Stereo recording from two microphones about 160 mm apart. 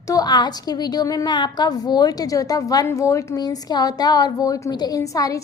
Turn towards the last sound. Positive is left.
turn(degrees=20)  # may be behind; listen again after turning